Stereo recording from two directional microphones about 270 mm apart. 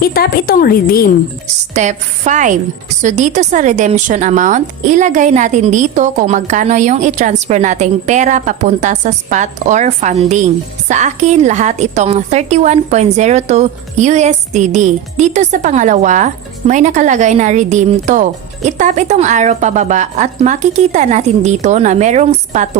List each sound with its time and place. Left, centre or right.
0.0 s a woman's voice: left
1.7 s a woman's voice: right